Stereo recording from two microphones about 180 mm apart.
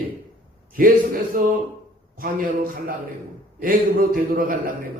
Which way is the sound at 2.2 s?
50° right (ahead or behind).